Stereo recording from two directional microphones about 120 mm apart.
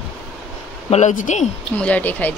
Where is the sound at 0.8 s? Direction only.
70° left (ahead or behind).